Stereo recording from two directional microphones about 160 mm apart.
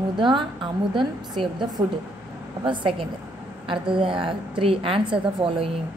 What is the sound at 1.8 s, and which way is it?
A woman's voice, 30° right (ahead or behind).